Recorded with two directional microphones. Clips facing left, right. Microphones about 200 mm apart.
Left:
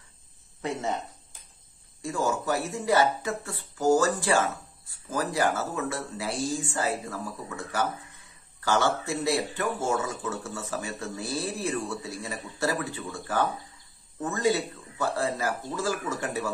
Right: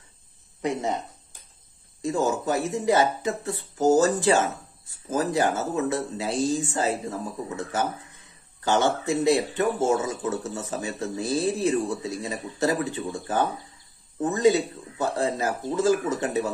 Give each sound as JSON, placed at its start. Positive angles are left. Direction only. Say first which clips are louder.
{"t": 0.6, "sound": "speech", "louder": "right 4 dB", "side_deg": -15}